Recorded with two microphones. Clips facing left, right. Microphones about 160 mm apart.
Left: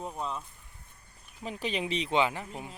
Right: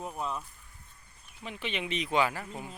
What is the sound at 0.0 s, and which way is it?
Speech, 5° right (ahead or behind).